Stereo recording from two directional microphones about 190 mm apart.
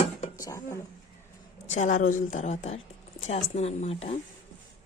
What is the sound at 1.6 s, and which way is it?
A woman's voice, 40° left (ahead or behind).